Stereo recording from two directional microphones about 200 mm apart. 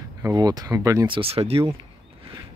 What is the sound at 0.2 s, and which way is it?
Speech, 20° right (ahead or behind).